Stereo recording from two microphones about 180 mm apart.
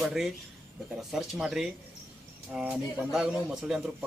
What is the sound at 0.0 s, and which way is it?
A man's voice, centre (ahead or behind).